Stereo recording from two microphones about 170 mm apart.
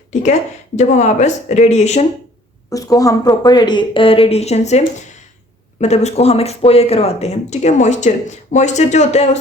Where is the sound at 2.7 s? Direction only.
20° left (ahead or behind).